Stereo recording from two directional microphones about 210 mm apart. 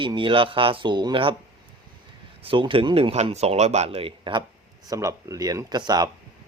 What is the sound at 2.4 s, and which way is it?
Speech, 25° right (ahead or behind).